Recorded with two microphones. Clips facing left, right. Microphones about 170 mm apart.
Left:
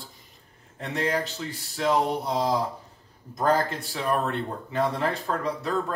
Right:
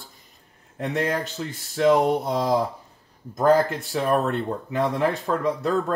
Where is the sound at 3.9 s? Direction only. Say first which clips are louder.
Right 5 dB; 50° right (ahead or behind).